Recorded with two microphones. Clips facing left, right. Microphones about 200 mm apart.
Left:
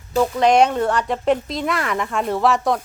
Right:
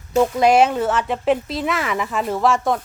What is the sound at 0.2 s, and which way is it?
Speech, 10° right (ahead or behind).